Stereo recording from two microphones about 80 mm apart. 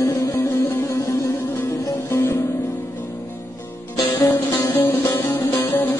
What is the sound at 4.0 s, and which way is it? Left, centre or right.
Music, left.